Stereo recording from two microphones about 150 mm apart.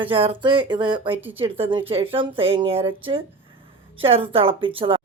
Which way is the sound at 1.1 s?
10° right (ahead or behind).